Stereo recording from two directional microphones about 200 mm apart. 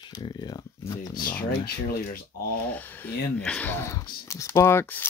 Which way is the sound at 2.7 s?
10° left (ahead or behind).